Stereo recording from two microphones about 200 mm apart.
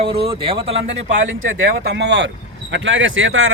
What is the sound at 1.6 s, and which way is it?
Speech, 55° right (ahead or behind).